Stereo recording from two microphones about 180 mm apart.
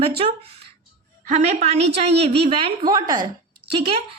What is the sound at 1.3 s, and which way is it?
A woman's voice, 40° right (ahead or behind).